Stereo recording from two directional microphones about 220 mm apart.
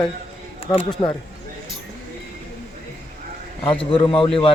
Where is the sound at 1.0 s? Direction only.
20° left (ahead or behind).